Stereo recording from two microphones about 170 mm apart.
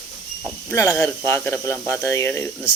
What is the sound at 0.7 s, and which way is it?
Speech, 15° left (ahead or behind).